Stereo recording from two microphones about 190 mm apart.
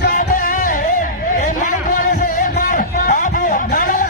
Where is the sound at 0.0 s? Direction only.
45° left (ahead or behind).